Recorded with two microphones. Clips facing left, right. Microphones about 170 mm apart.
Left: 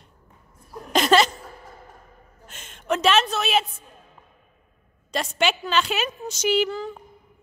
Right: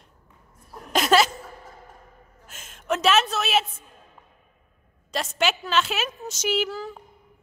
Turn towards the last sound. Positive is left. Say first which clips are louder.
# left 4 dB
turn(degrees=-5)  # may be behind; listen again after turning